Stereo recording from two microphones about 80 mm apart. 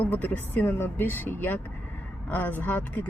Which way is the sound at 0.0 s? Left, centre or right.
Left.